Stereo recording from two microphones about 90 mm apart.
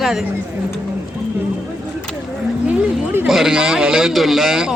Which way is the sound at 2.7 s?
20° right (ahead or behind).